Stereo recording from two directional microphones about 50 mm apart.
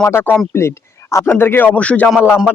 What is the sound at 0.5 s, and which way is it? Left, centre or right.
Speech, left.